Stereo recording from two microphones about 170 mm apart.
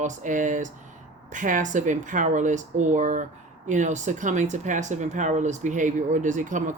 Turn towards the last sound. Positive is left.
turn(degrees=-50)  # may be behind; listen again after turning